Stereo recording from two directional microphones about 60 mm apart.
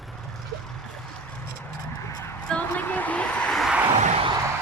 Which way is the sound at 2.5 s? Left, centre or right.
Left.